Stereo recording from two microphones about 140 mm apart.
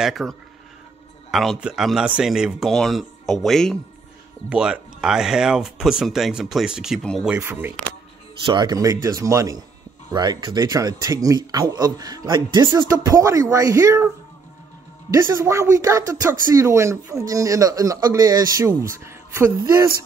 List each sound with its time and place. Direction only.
0.0 s speech: centre (ahead or behind)
7.2 s speech: 10° right (ahead or behind)
8.5 s speech: 30° right (ahead or behind)
12.7 s speech: 20° right (ahead or behind)